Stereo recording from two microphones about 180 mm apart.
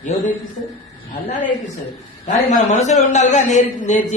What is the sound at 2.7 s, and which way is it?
A woman's voice, 40° left (ahead or behind).